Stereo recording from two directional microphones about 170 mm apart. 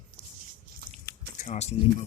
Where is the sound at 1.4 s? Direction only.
40° left (ahead or behind).